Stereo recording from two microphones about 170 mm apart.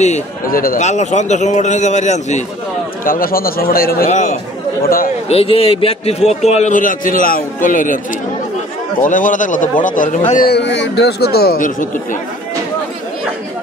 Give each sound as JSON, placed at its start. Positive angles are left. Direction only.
{"t": 0.0, "sound": "a man's voice", "side_deg": 50}
{"t": 3.1, "sound": "a man's voice", "side_deg": 60}
{"t": 4.1, "sound": "a man's voice", "side_deg": 45}
{"t": 4.8, "sound": "a man's voice", "side_deg": 55}
{"t": 5.3, "sound": "a man's voice", "side_deg": 35}
{"t": 9.0, "sound": "a man's voice", "side_deg": 50}
{"t": 10.5, "sound": "speech", "side_deg": 90}